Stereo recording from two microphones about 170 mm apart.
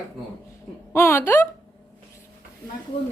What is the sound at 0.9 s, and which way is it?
Speech, 15° left (ahead or behind).